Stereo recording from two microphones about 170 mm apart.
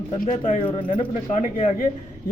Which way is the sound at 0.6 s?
30° left (ahead or behind).